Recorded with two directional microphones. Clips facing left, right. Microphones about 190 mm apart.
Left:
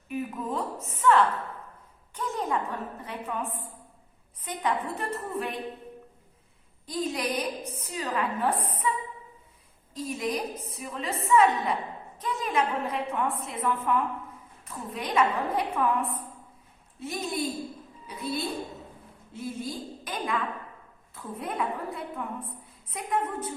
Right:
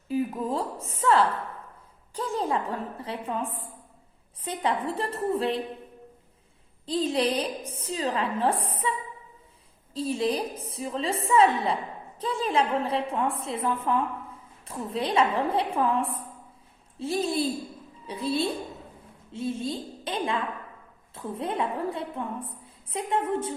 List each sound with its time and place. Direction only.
0.1 s a woman's voice: 30° right (ahead or behind)
6.8 s a woman's voice: 30° right (ahead or behind)